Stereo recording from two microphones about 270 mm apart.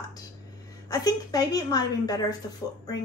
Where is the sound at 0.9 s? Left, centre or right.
Centre.